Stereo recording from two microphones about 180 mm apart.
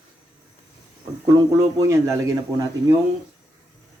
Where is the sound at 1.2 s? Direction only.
20° right (ahead or behind).